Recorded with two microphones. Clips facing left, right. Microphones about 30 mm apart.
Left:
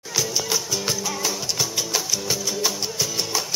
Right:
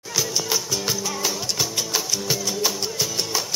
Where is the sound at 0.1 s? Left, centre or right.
Centre.